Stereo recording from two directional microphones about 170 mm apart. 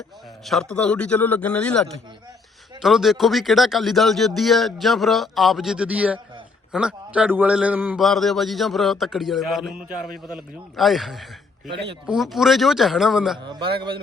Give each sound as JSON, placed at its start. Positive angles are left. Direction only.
{"t": 0.4, "sound": "a man's voice", "side_deg": 0}
{"t": 13.4, "sound": "a man's voice", "side_deg": -30}